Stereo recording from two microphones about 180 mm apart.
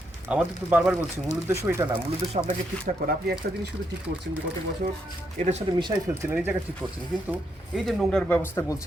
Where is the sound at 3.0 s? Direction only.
50° right (ahead or behind).